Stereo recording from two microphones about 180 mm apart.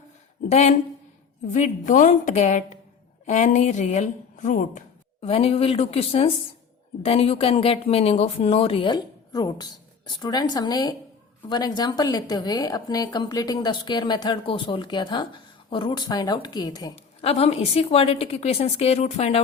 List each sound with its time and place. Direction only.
0.4 s a woman's voice: 40° left (ahead or behind)
5.2 s a woman's voice: 30° left (ahead or behind)
17.2 s speech: 35° left (ahead or behind)